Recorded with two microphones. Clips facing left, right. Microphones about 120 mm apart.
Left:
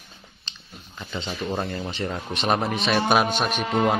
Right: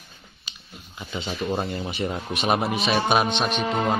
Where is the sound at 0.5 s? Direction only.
10° right (ahead or behind).